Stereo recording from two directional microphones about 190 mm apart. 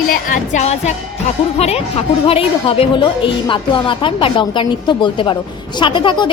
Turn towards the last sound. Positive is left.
turn(degrees=25)  # may be behind; listen again after turning